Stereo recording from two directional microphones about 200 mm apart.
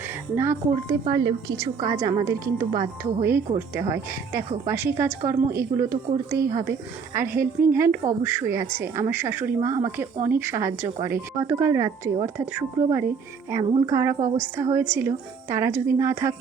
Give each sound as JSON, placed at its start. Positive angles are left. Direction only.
{"t": 0.1, "sound": "a woman's voice", "side_deg": -15}